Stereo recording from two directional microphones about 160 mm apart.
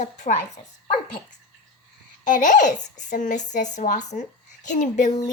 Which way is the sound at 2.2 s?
55° left (ahead or behind).